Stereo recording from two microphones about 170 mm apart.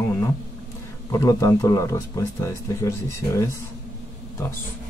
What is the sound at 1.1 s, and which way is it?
Speech, 20° left (ahead or behind).